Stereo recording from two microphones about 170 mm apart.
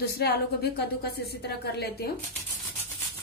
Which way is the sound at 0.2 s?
70° left (ahead or behind).